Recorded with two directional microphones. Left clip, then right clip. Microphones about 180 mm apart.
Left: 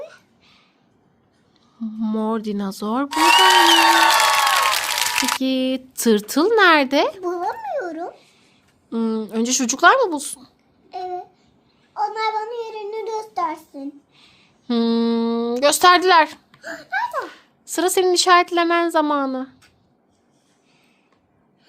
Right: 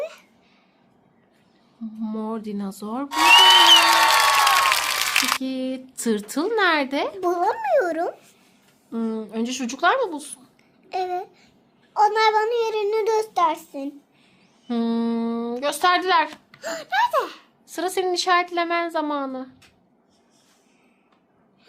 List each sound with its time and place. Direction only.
0.0 s a sound: 40° right (ahead or behind)
1.8 s speech: 35° left (ahead or behind)
3.1 s applause: centre (ahead or behind)
5.4 s speech: 45° left (ahead or behind)
7.2 s a child's voice: 40° right (ahead or behind)
8.9 s speech: 35° left (ahead or behind)
10.8 s babbling: 45° right (ahead or behind)
11.9 s a child's voice: 50° right (ahead or behind)
14.2 s speech: 35° left (ahead or behind)
16.6 s speech: 45° right (ahead or behind)
17.7 s speech: 45° left (ahead or behind)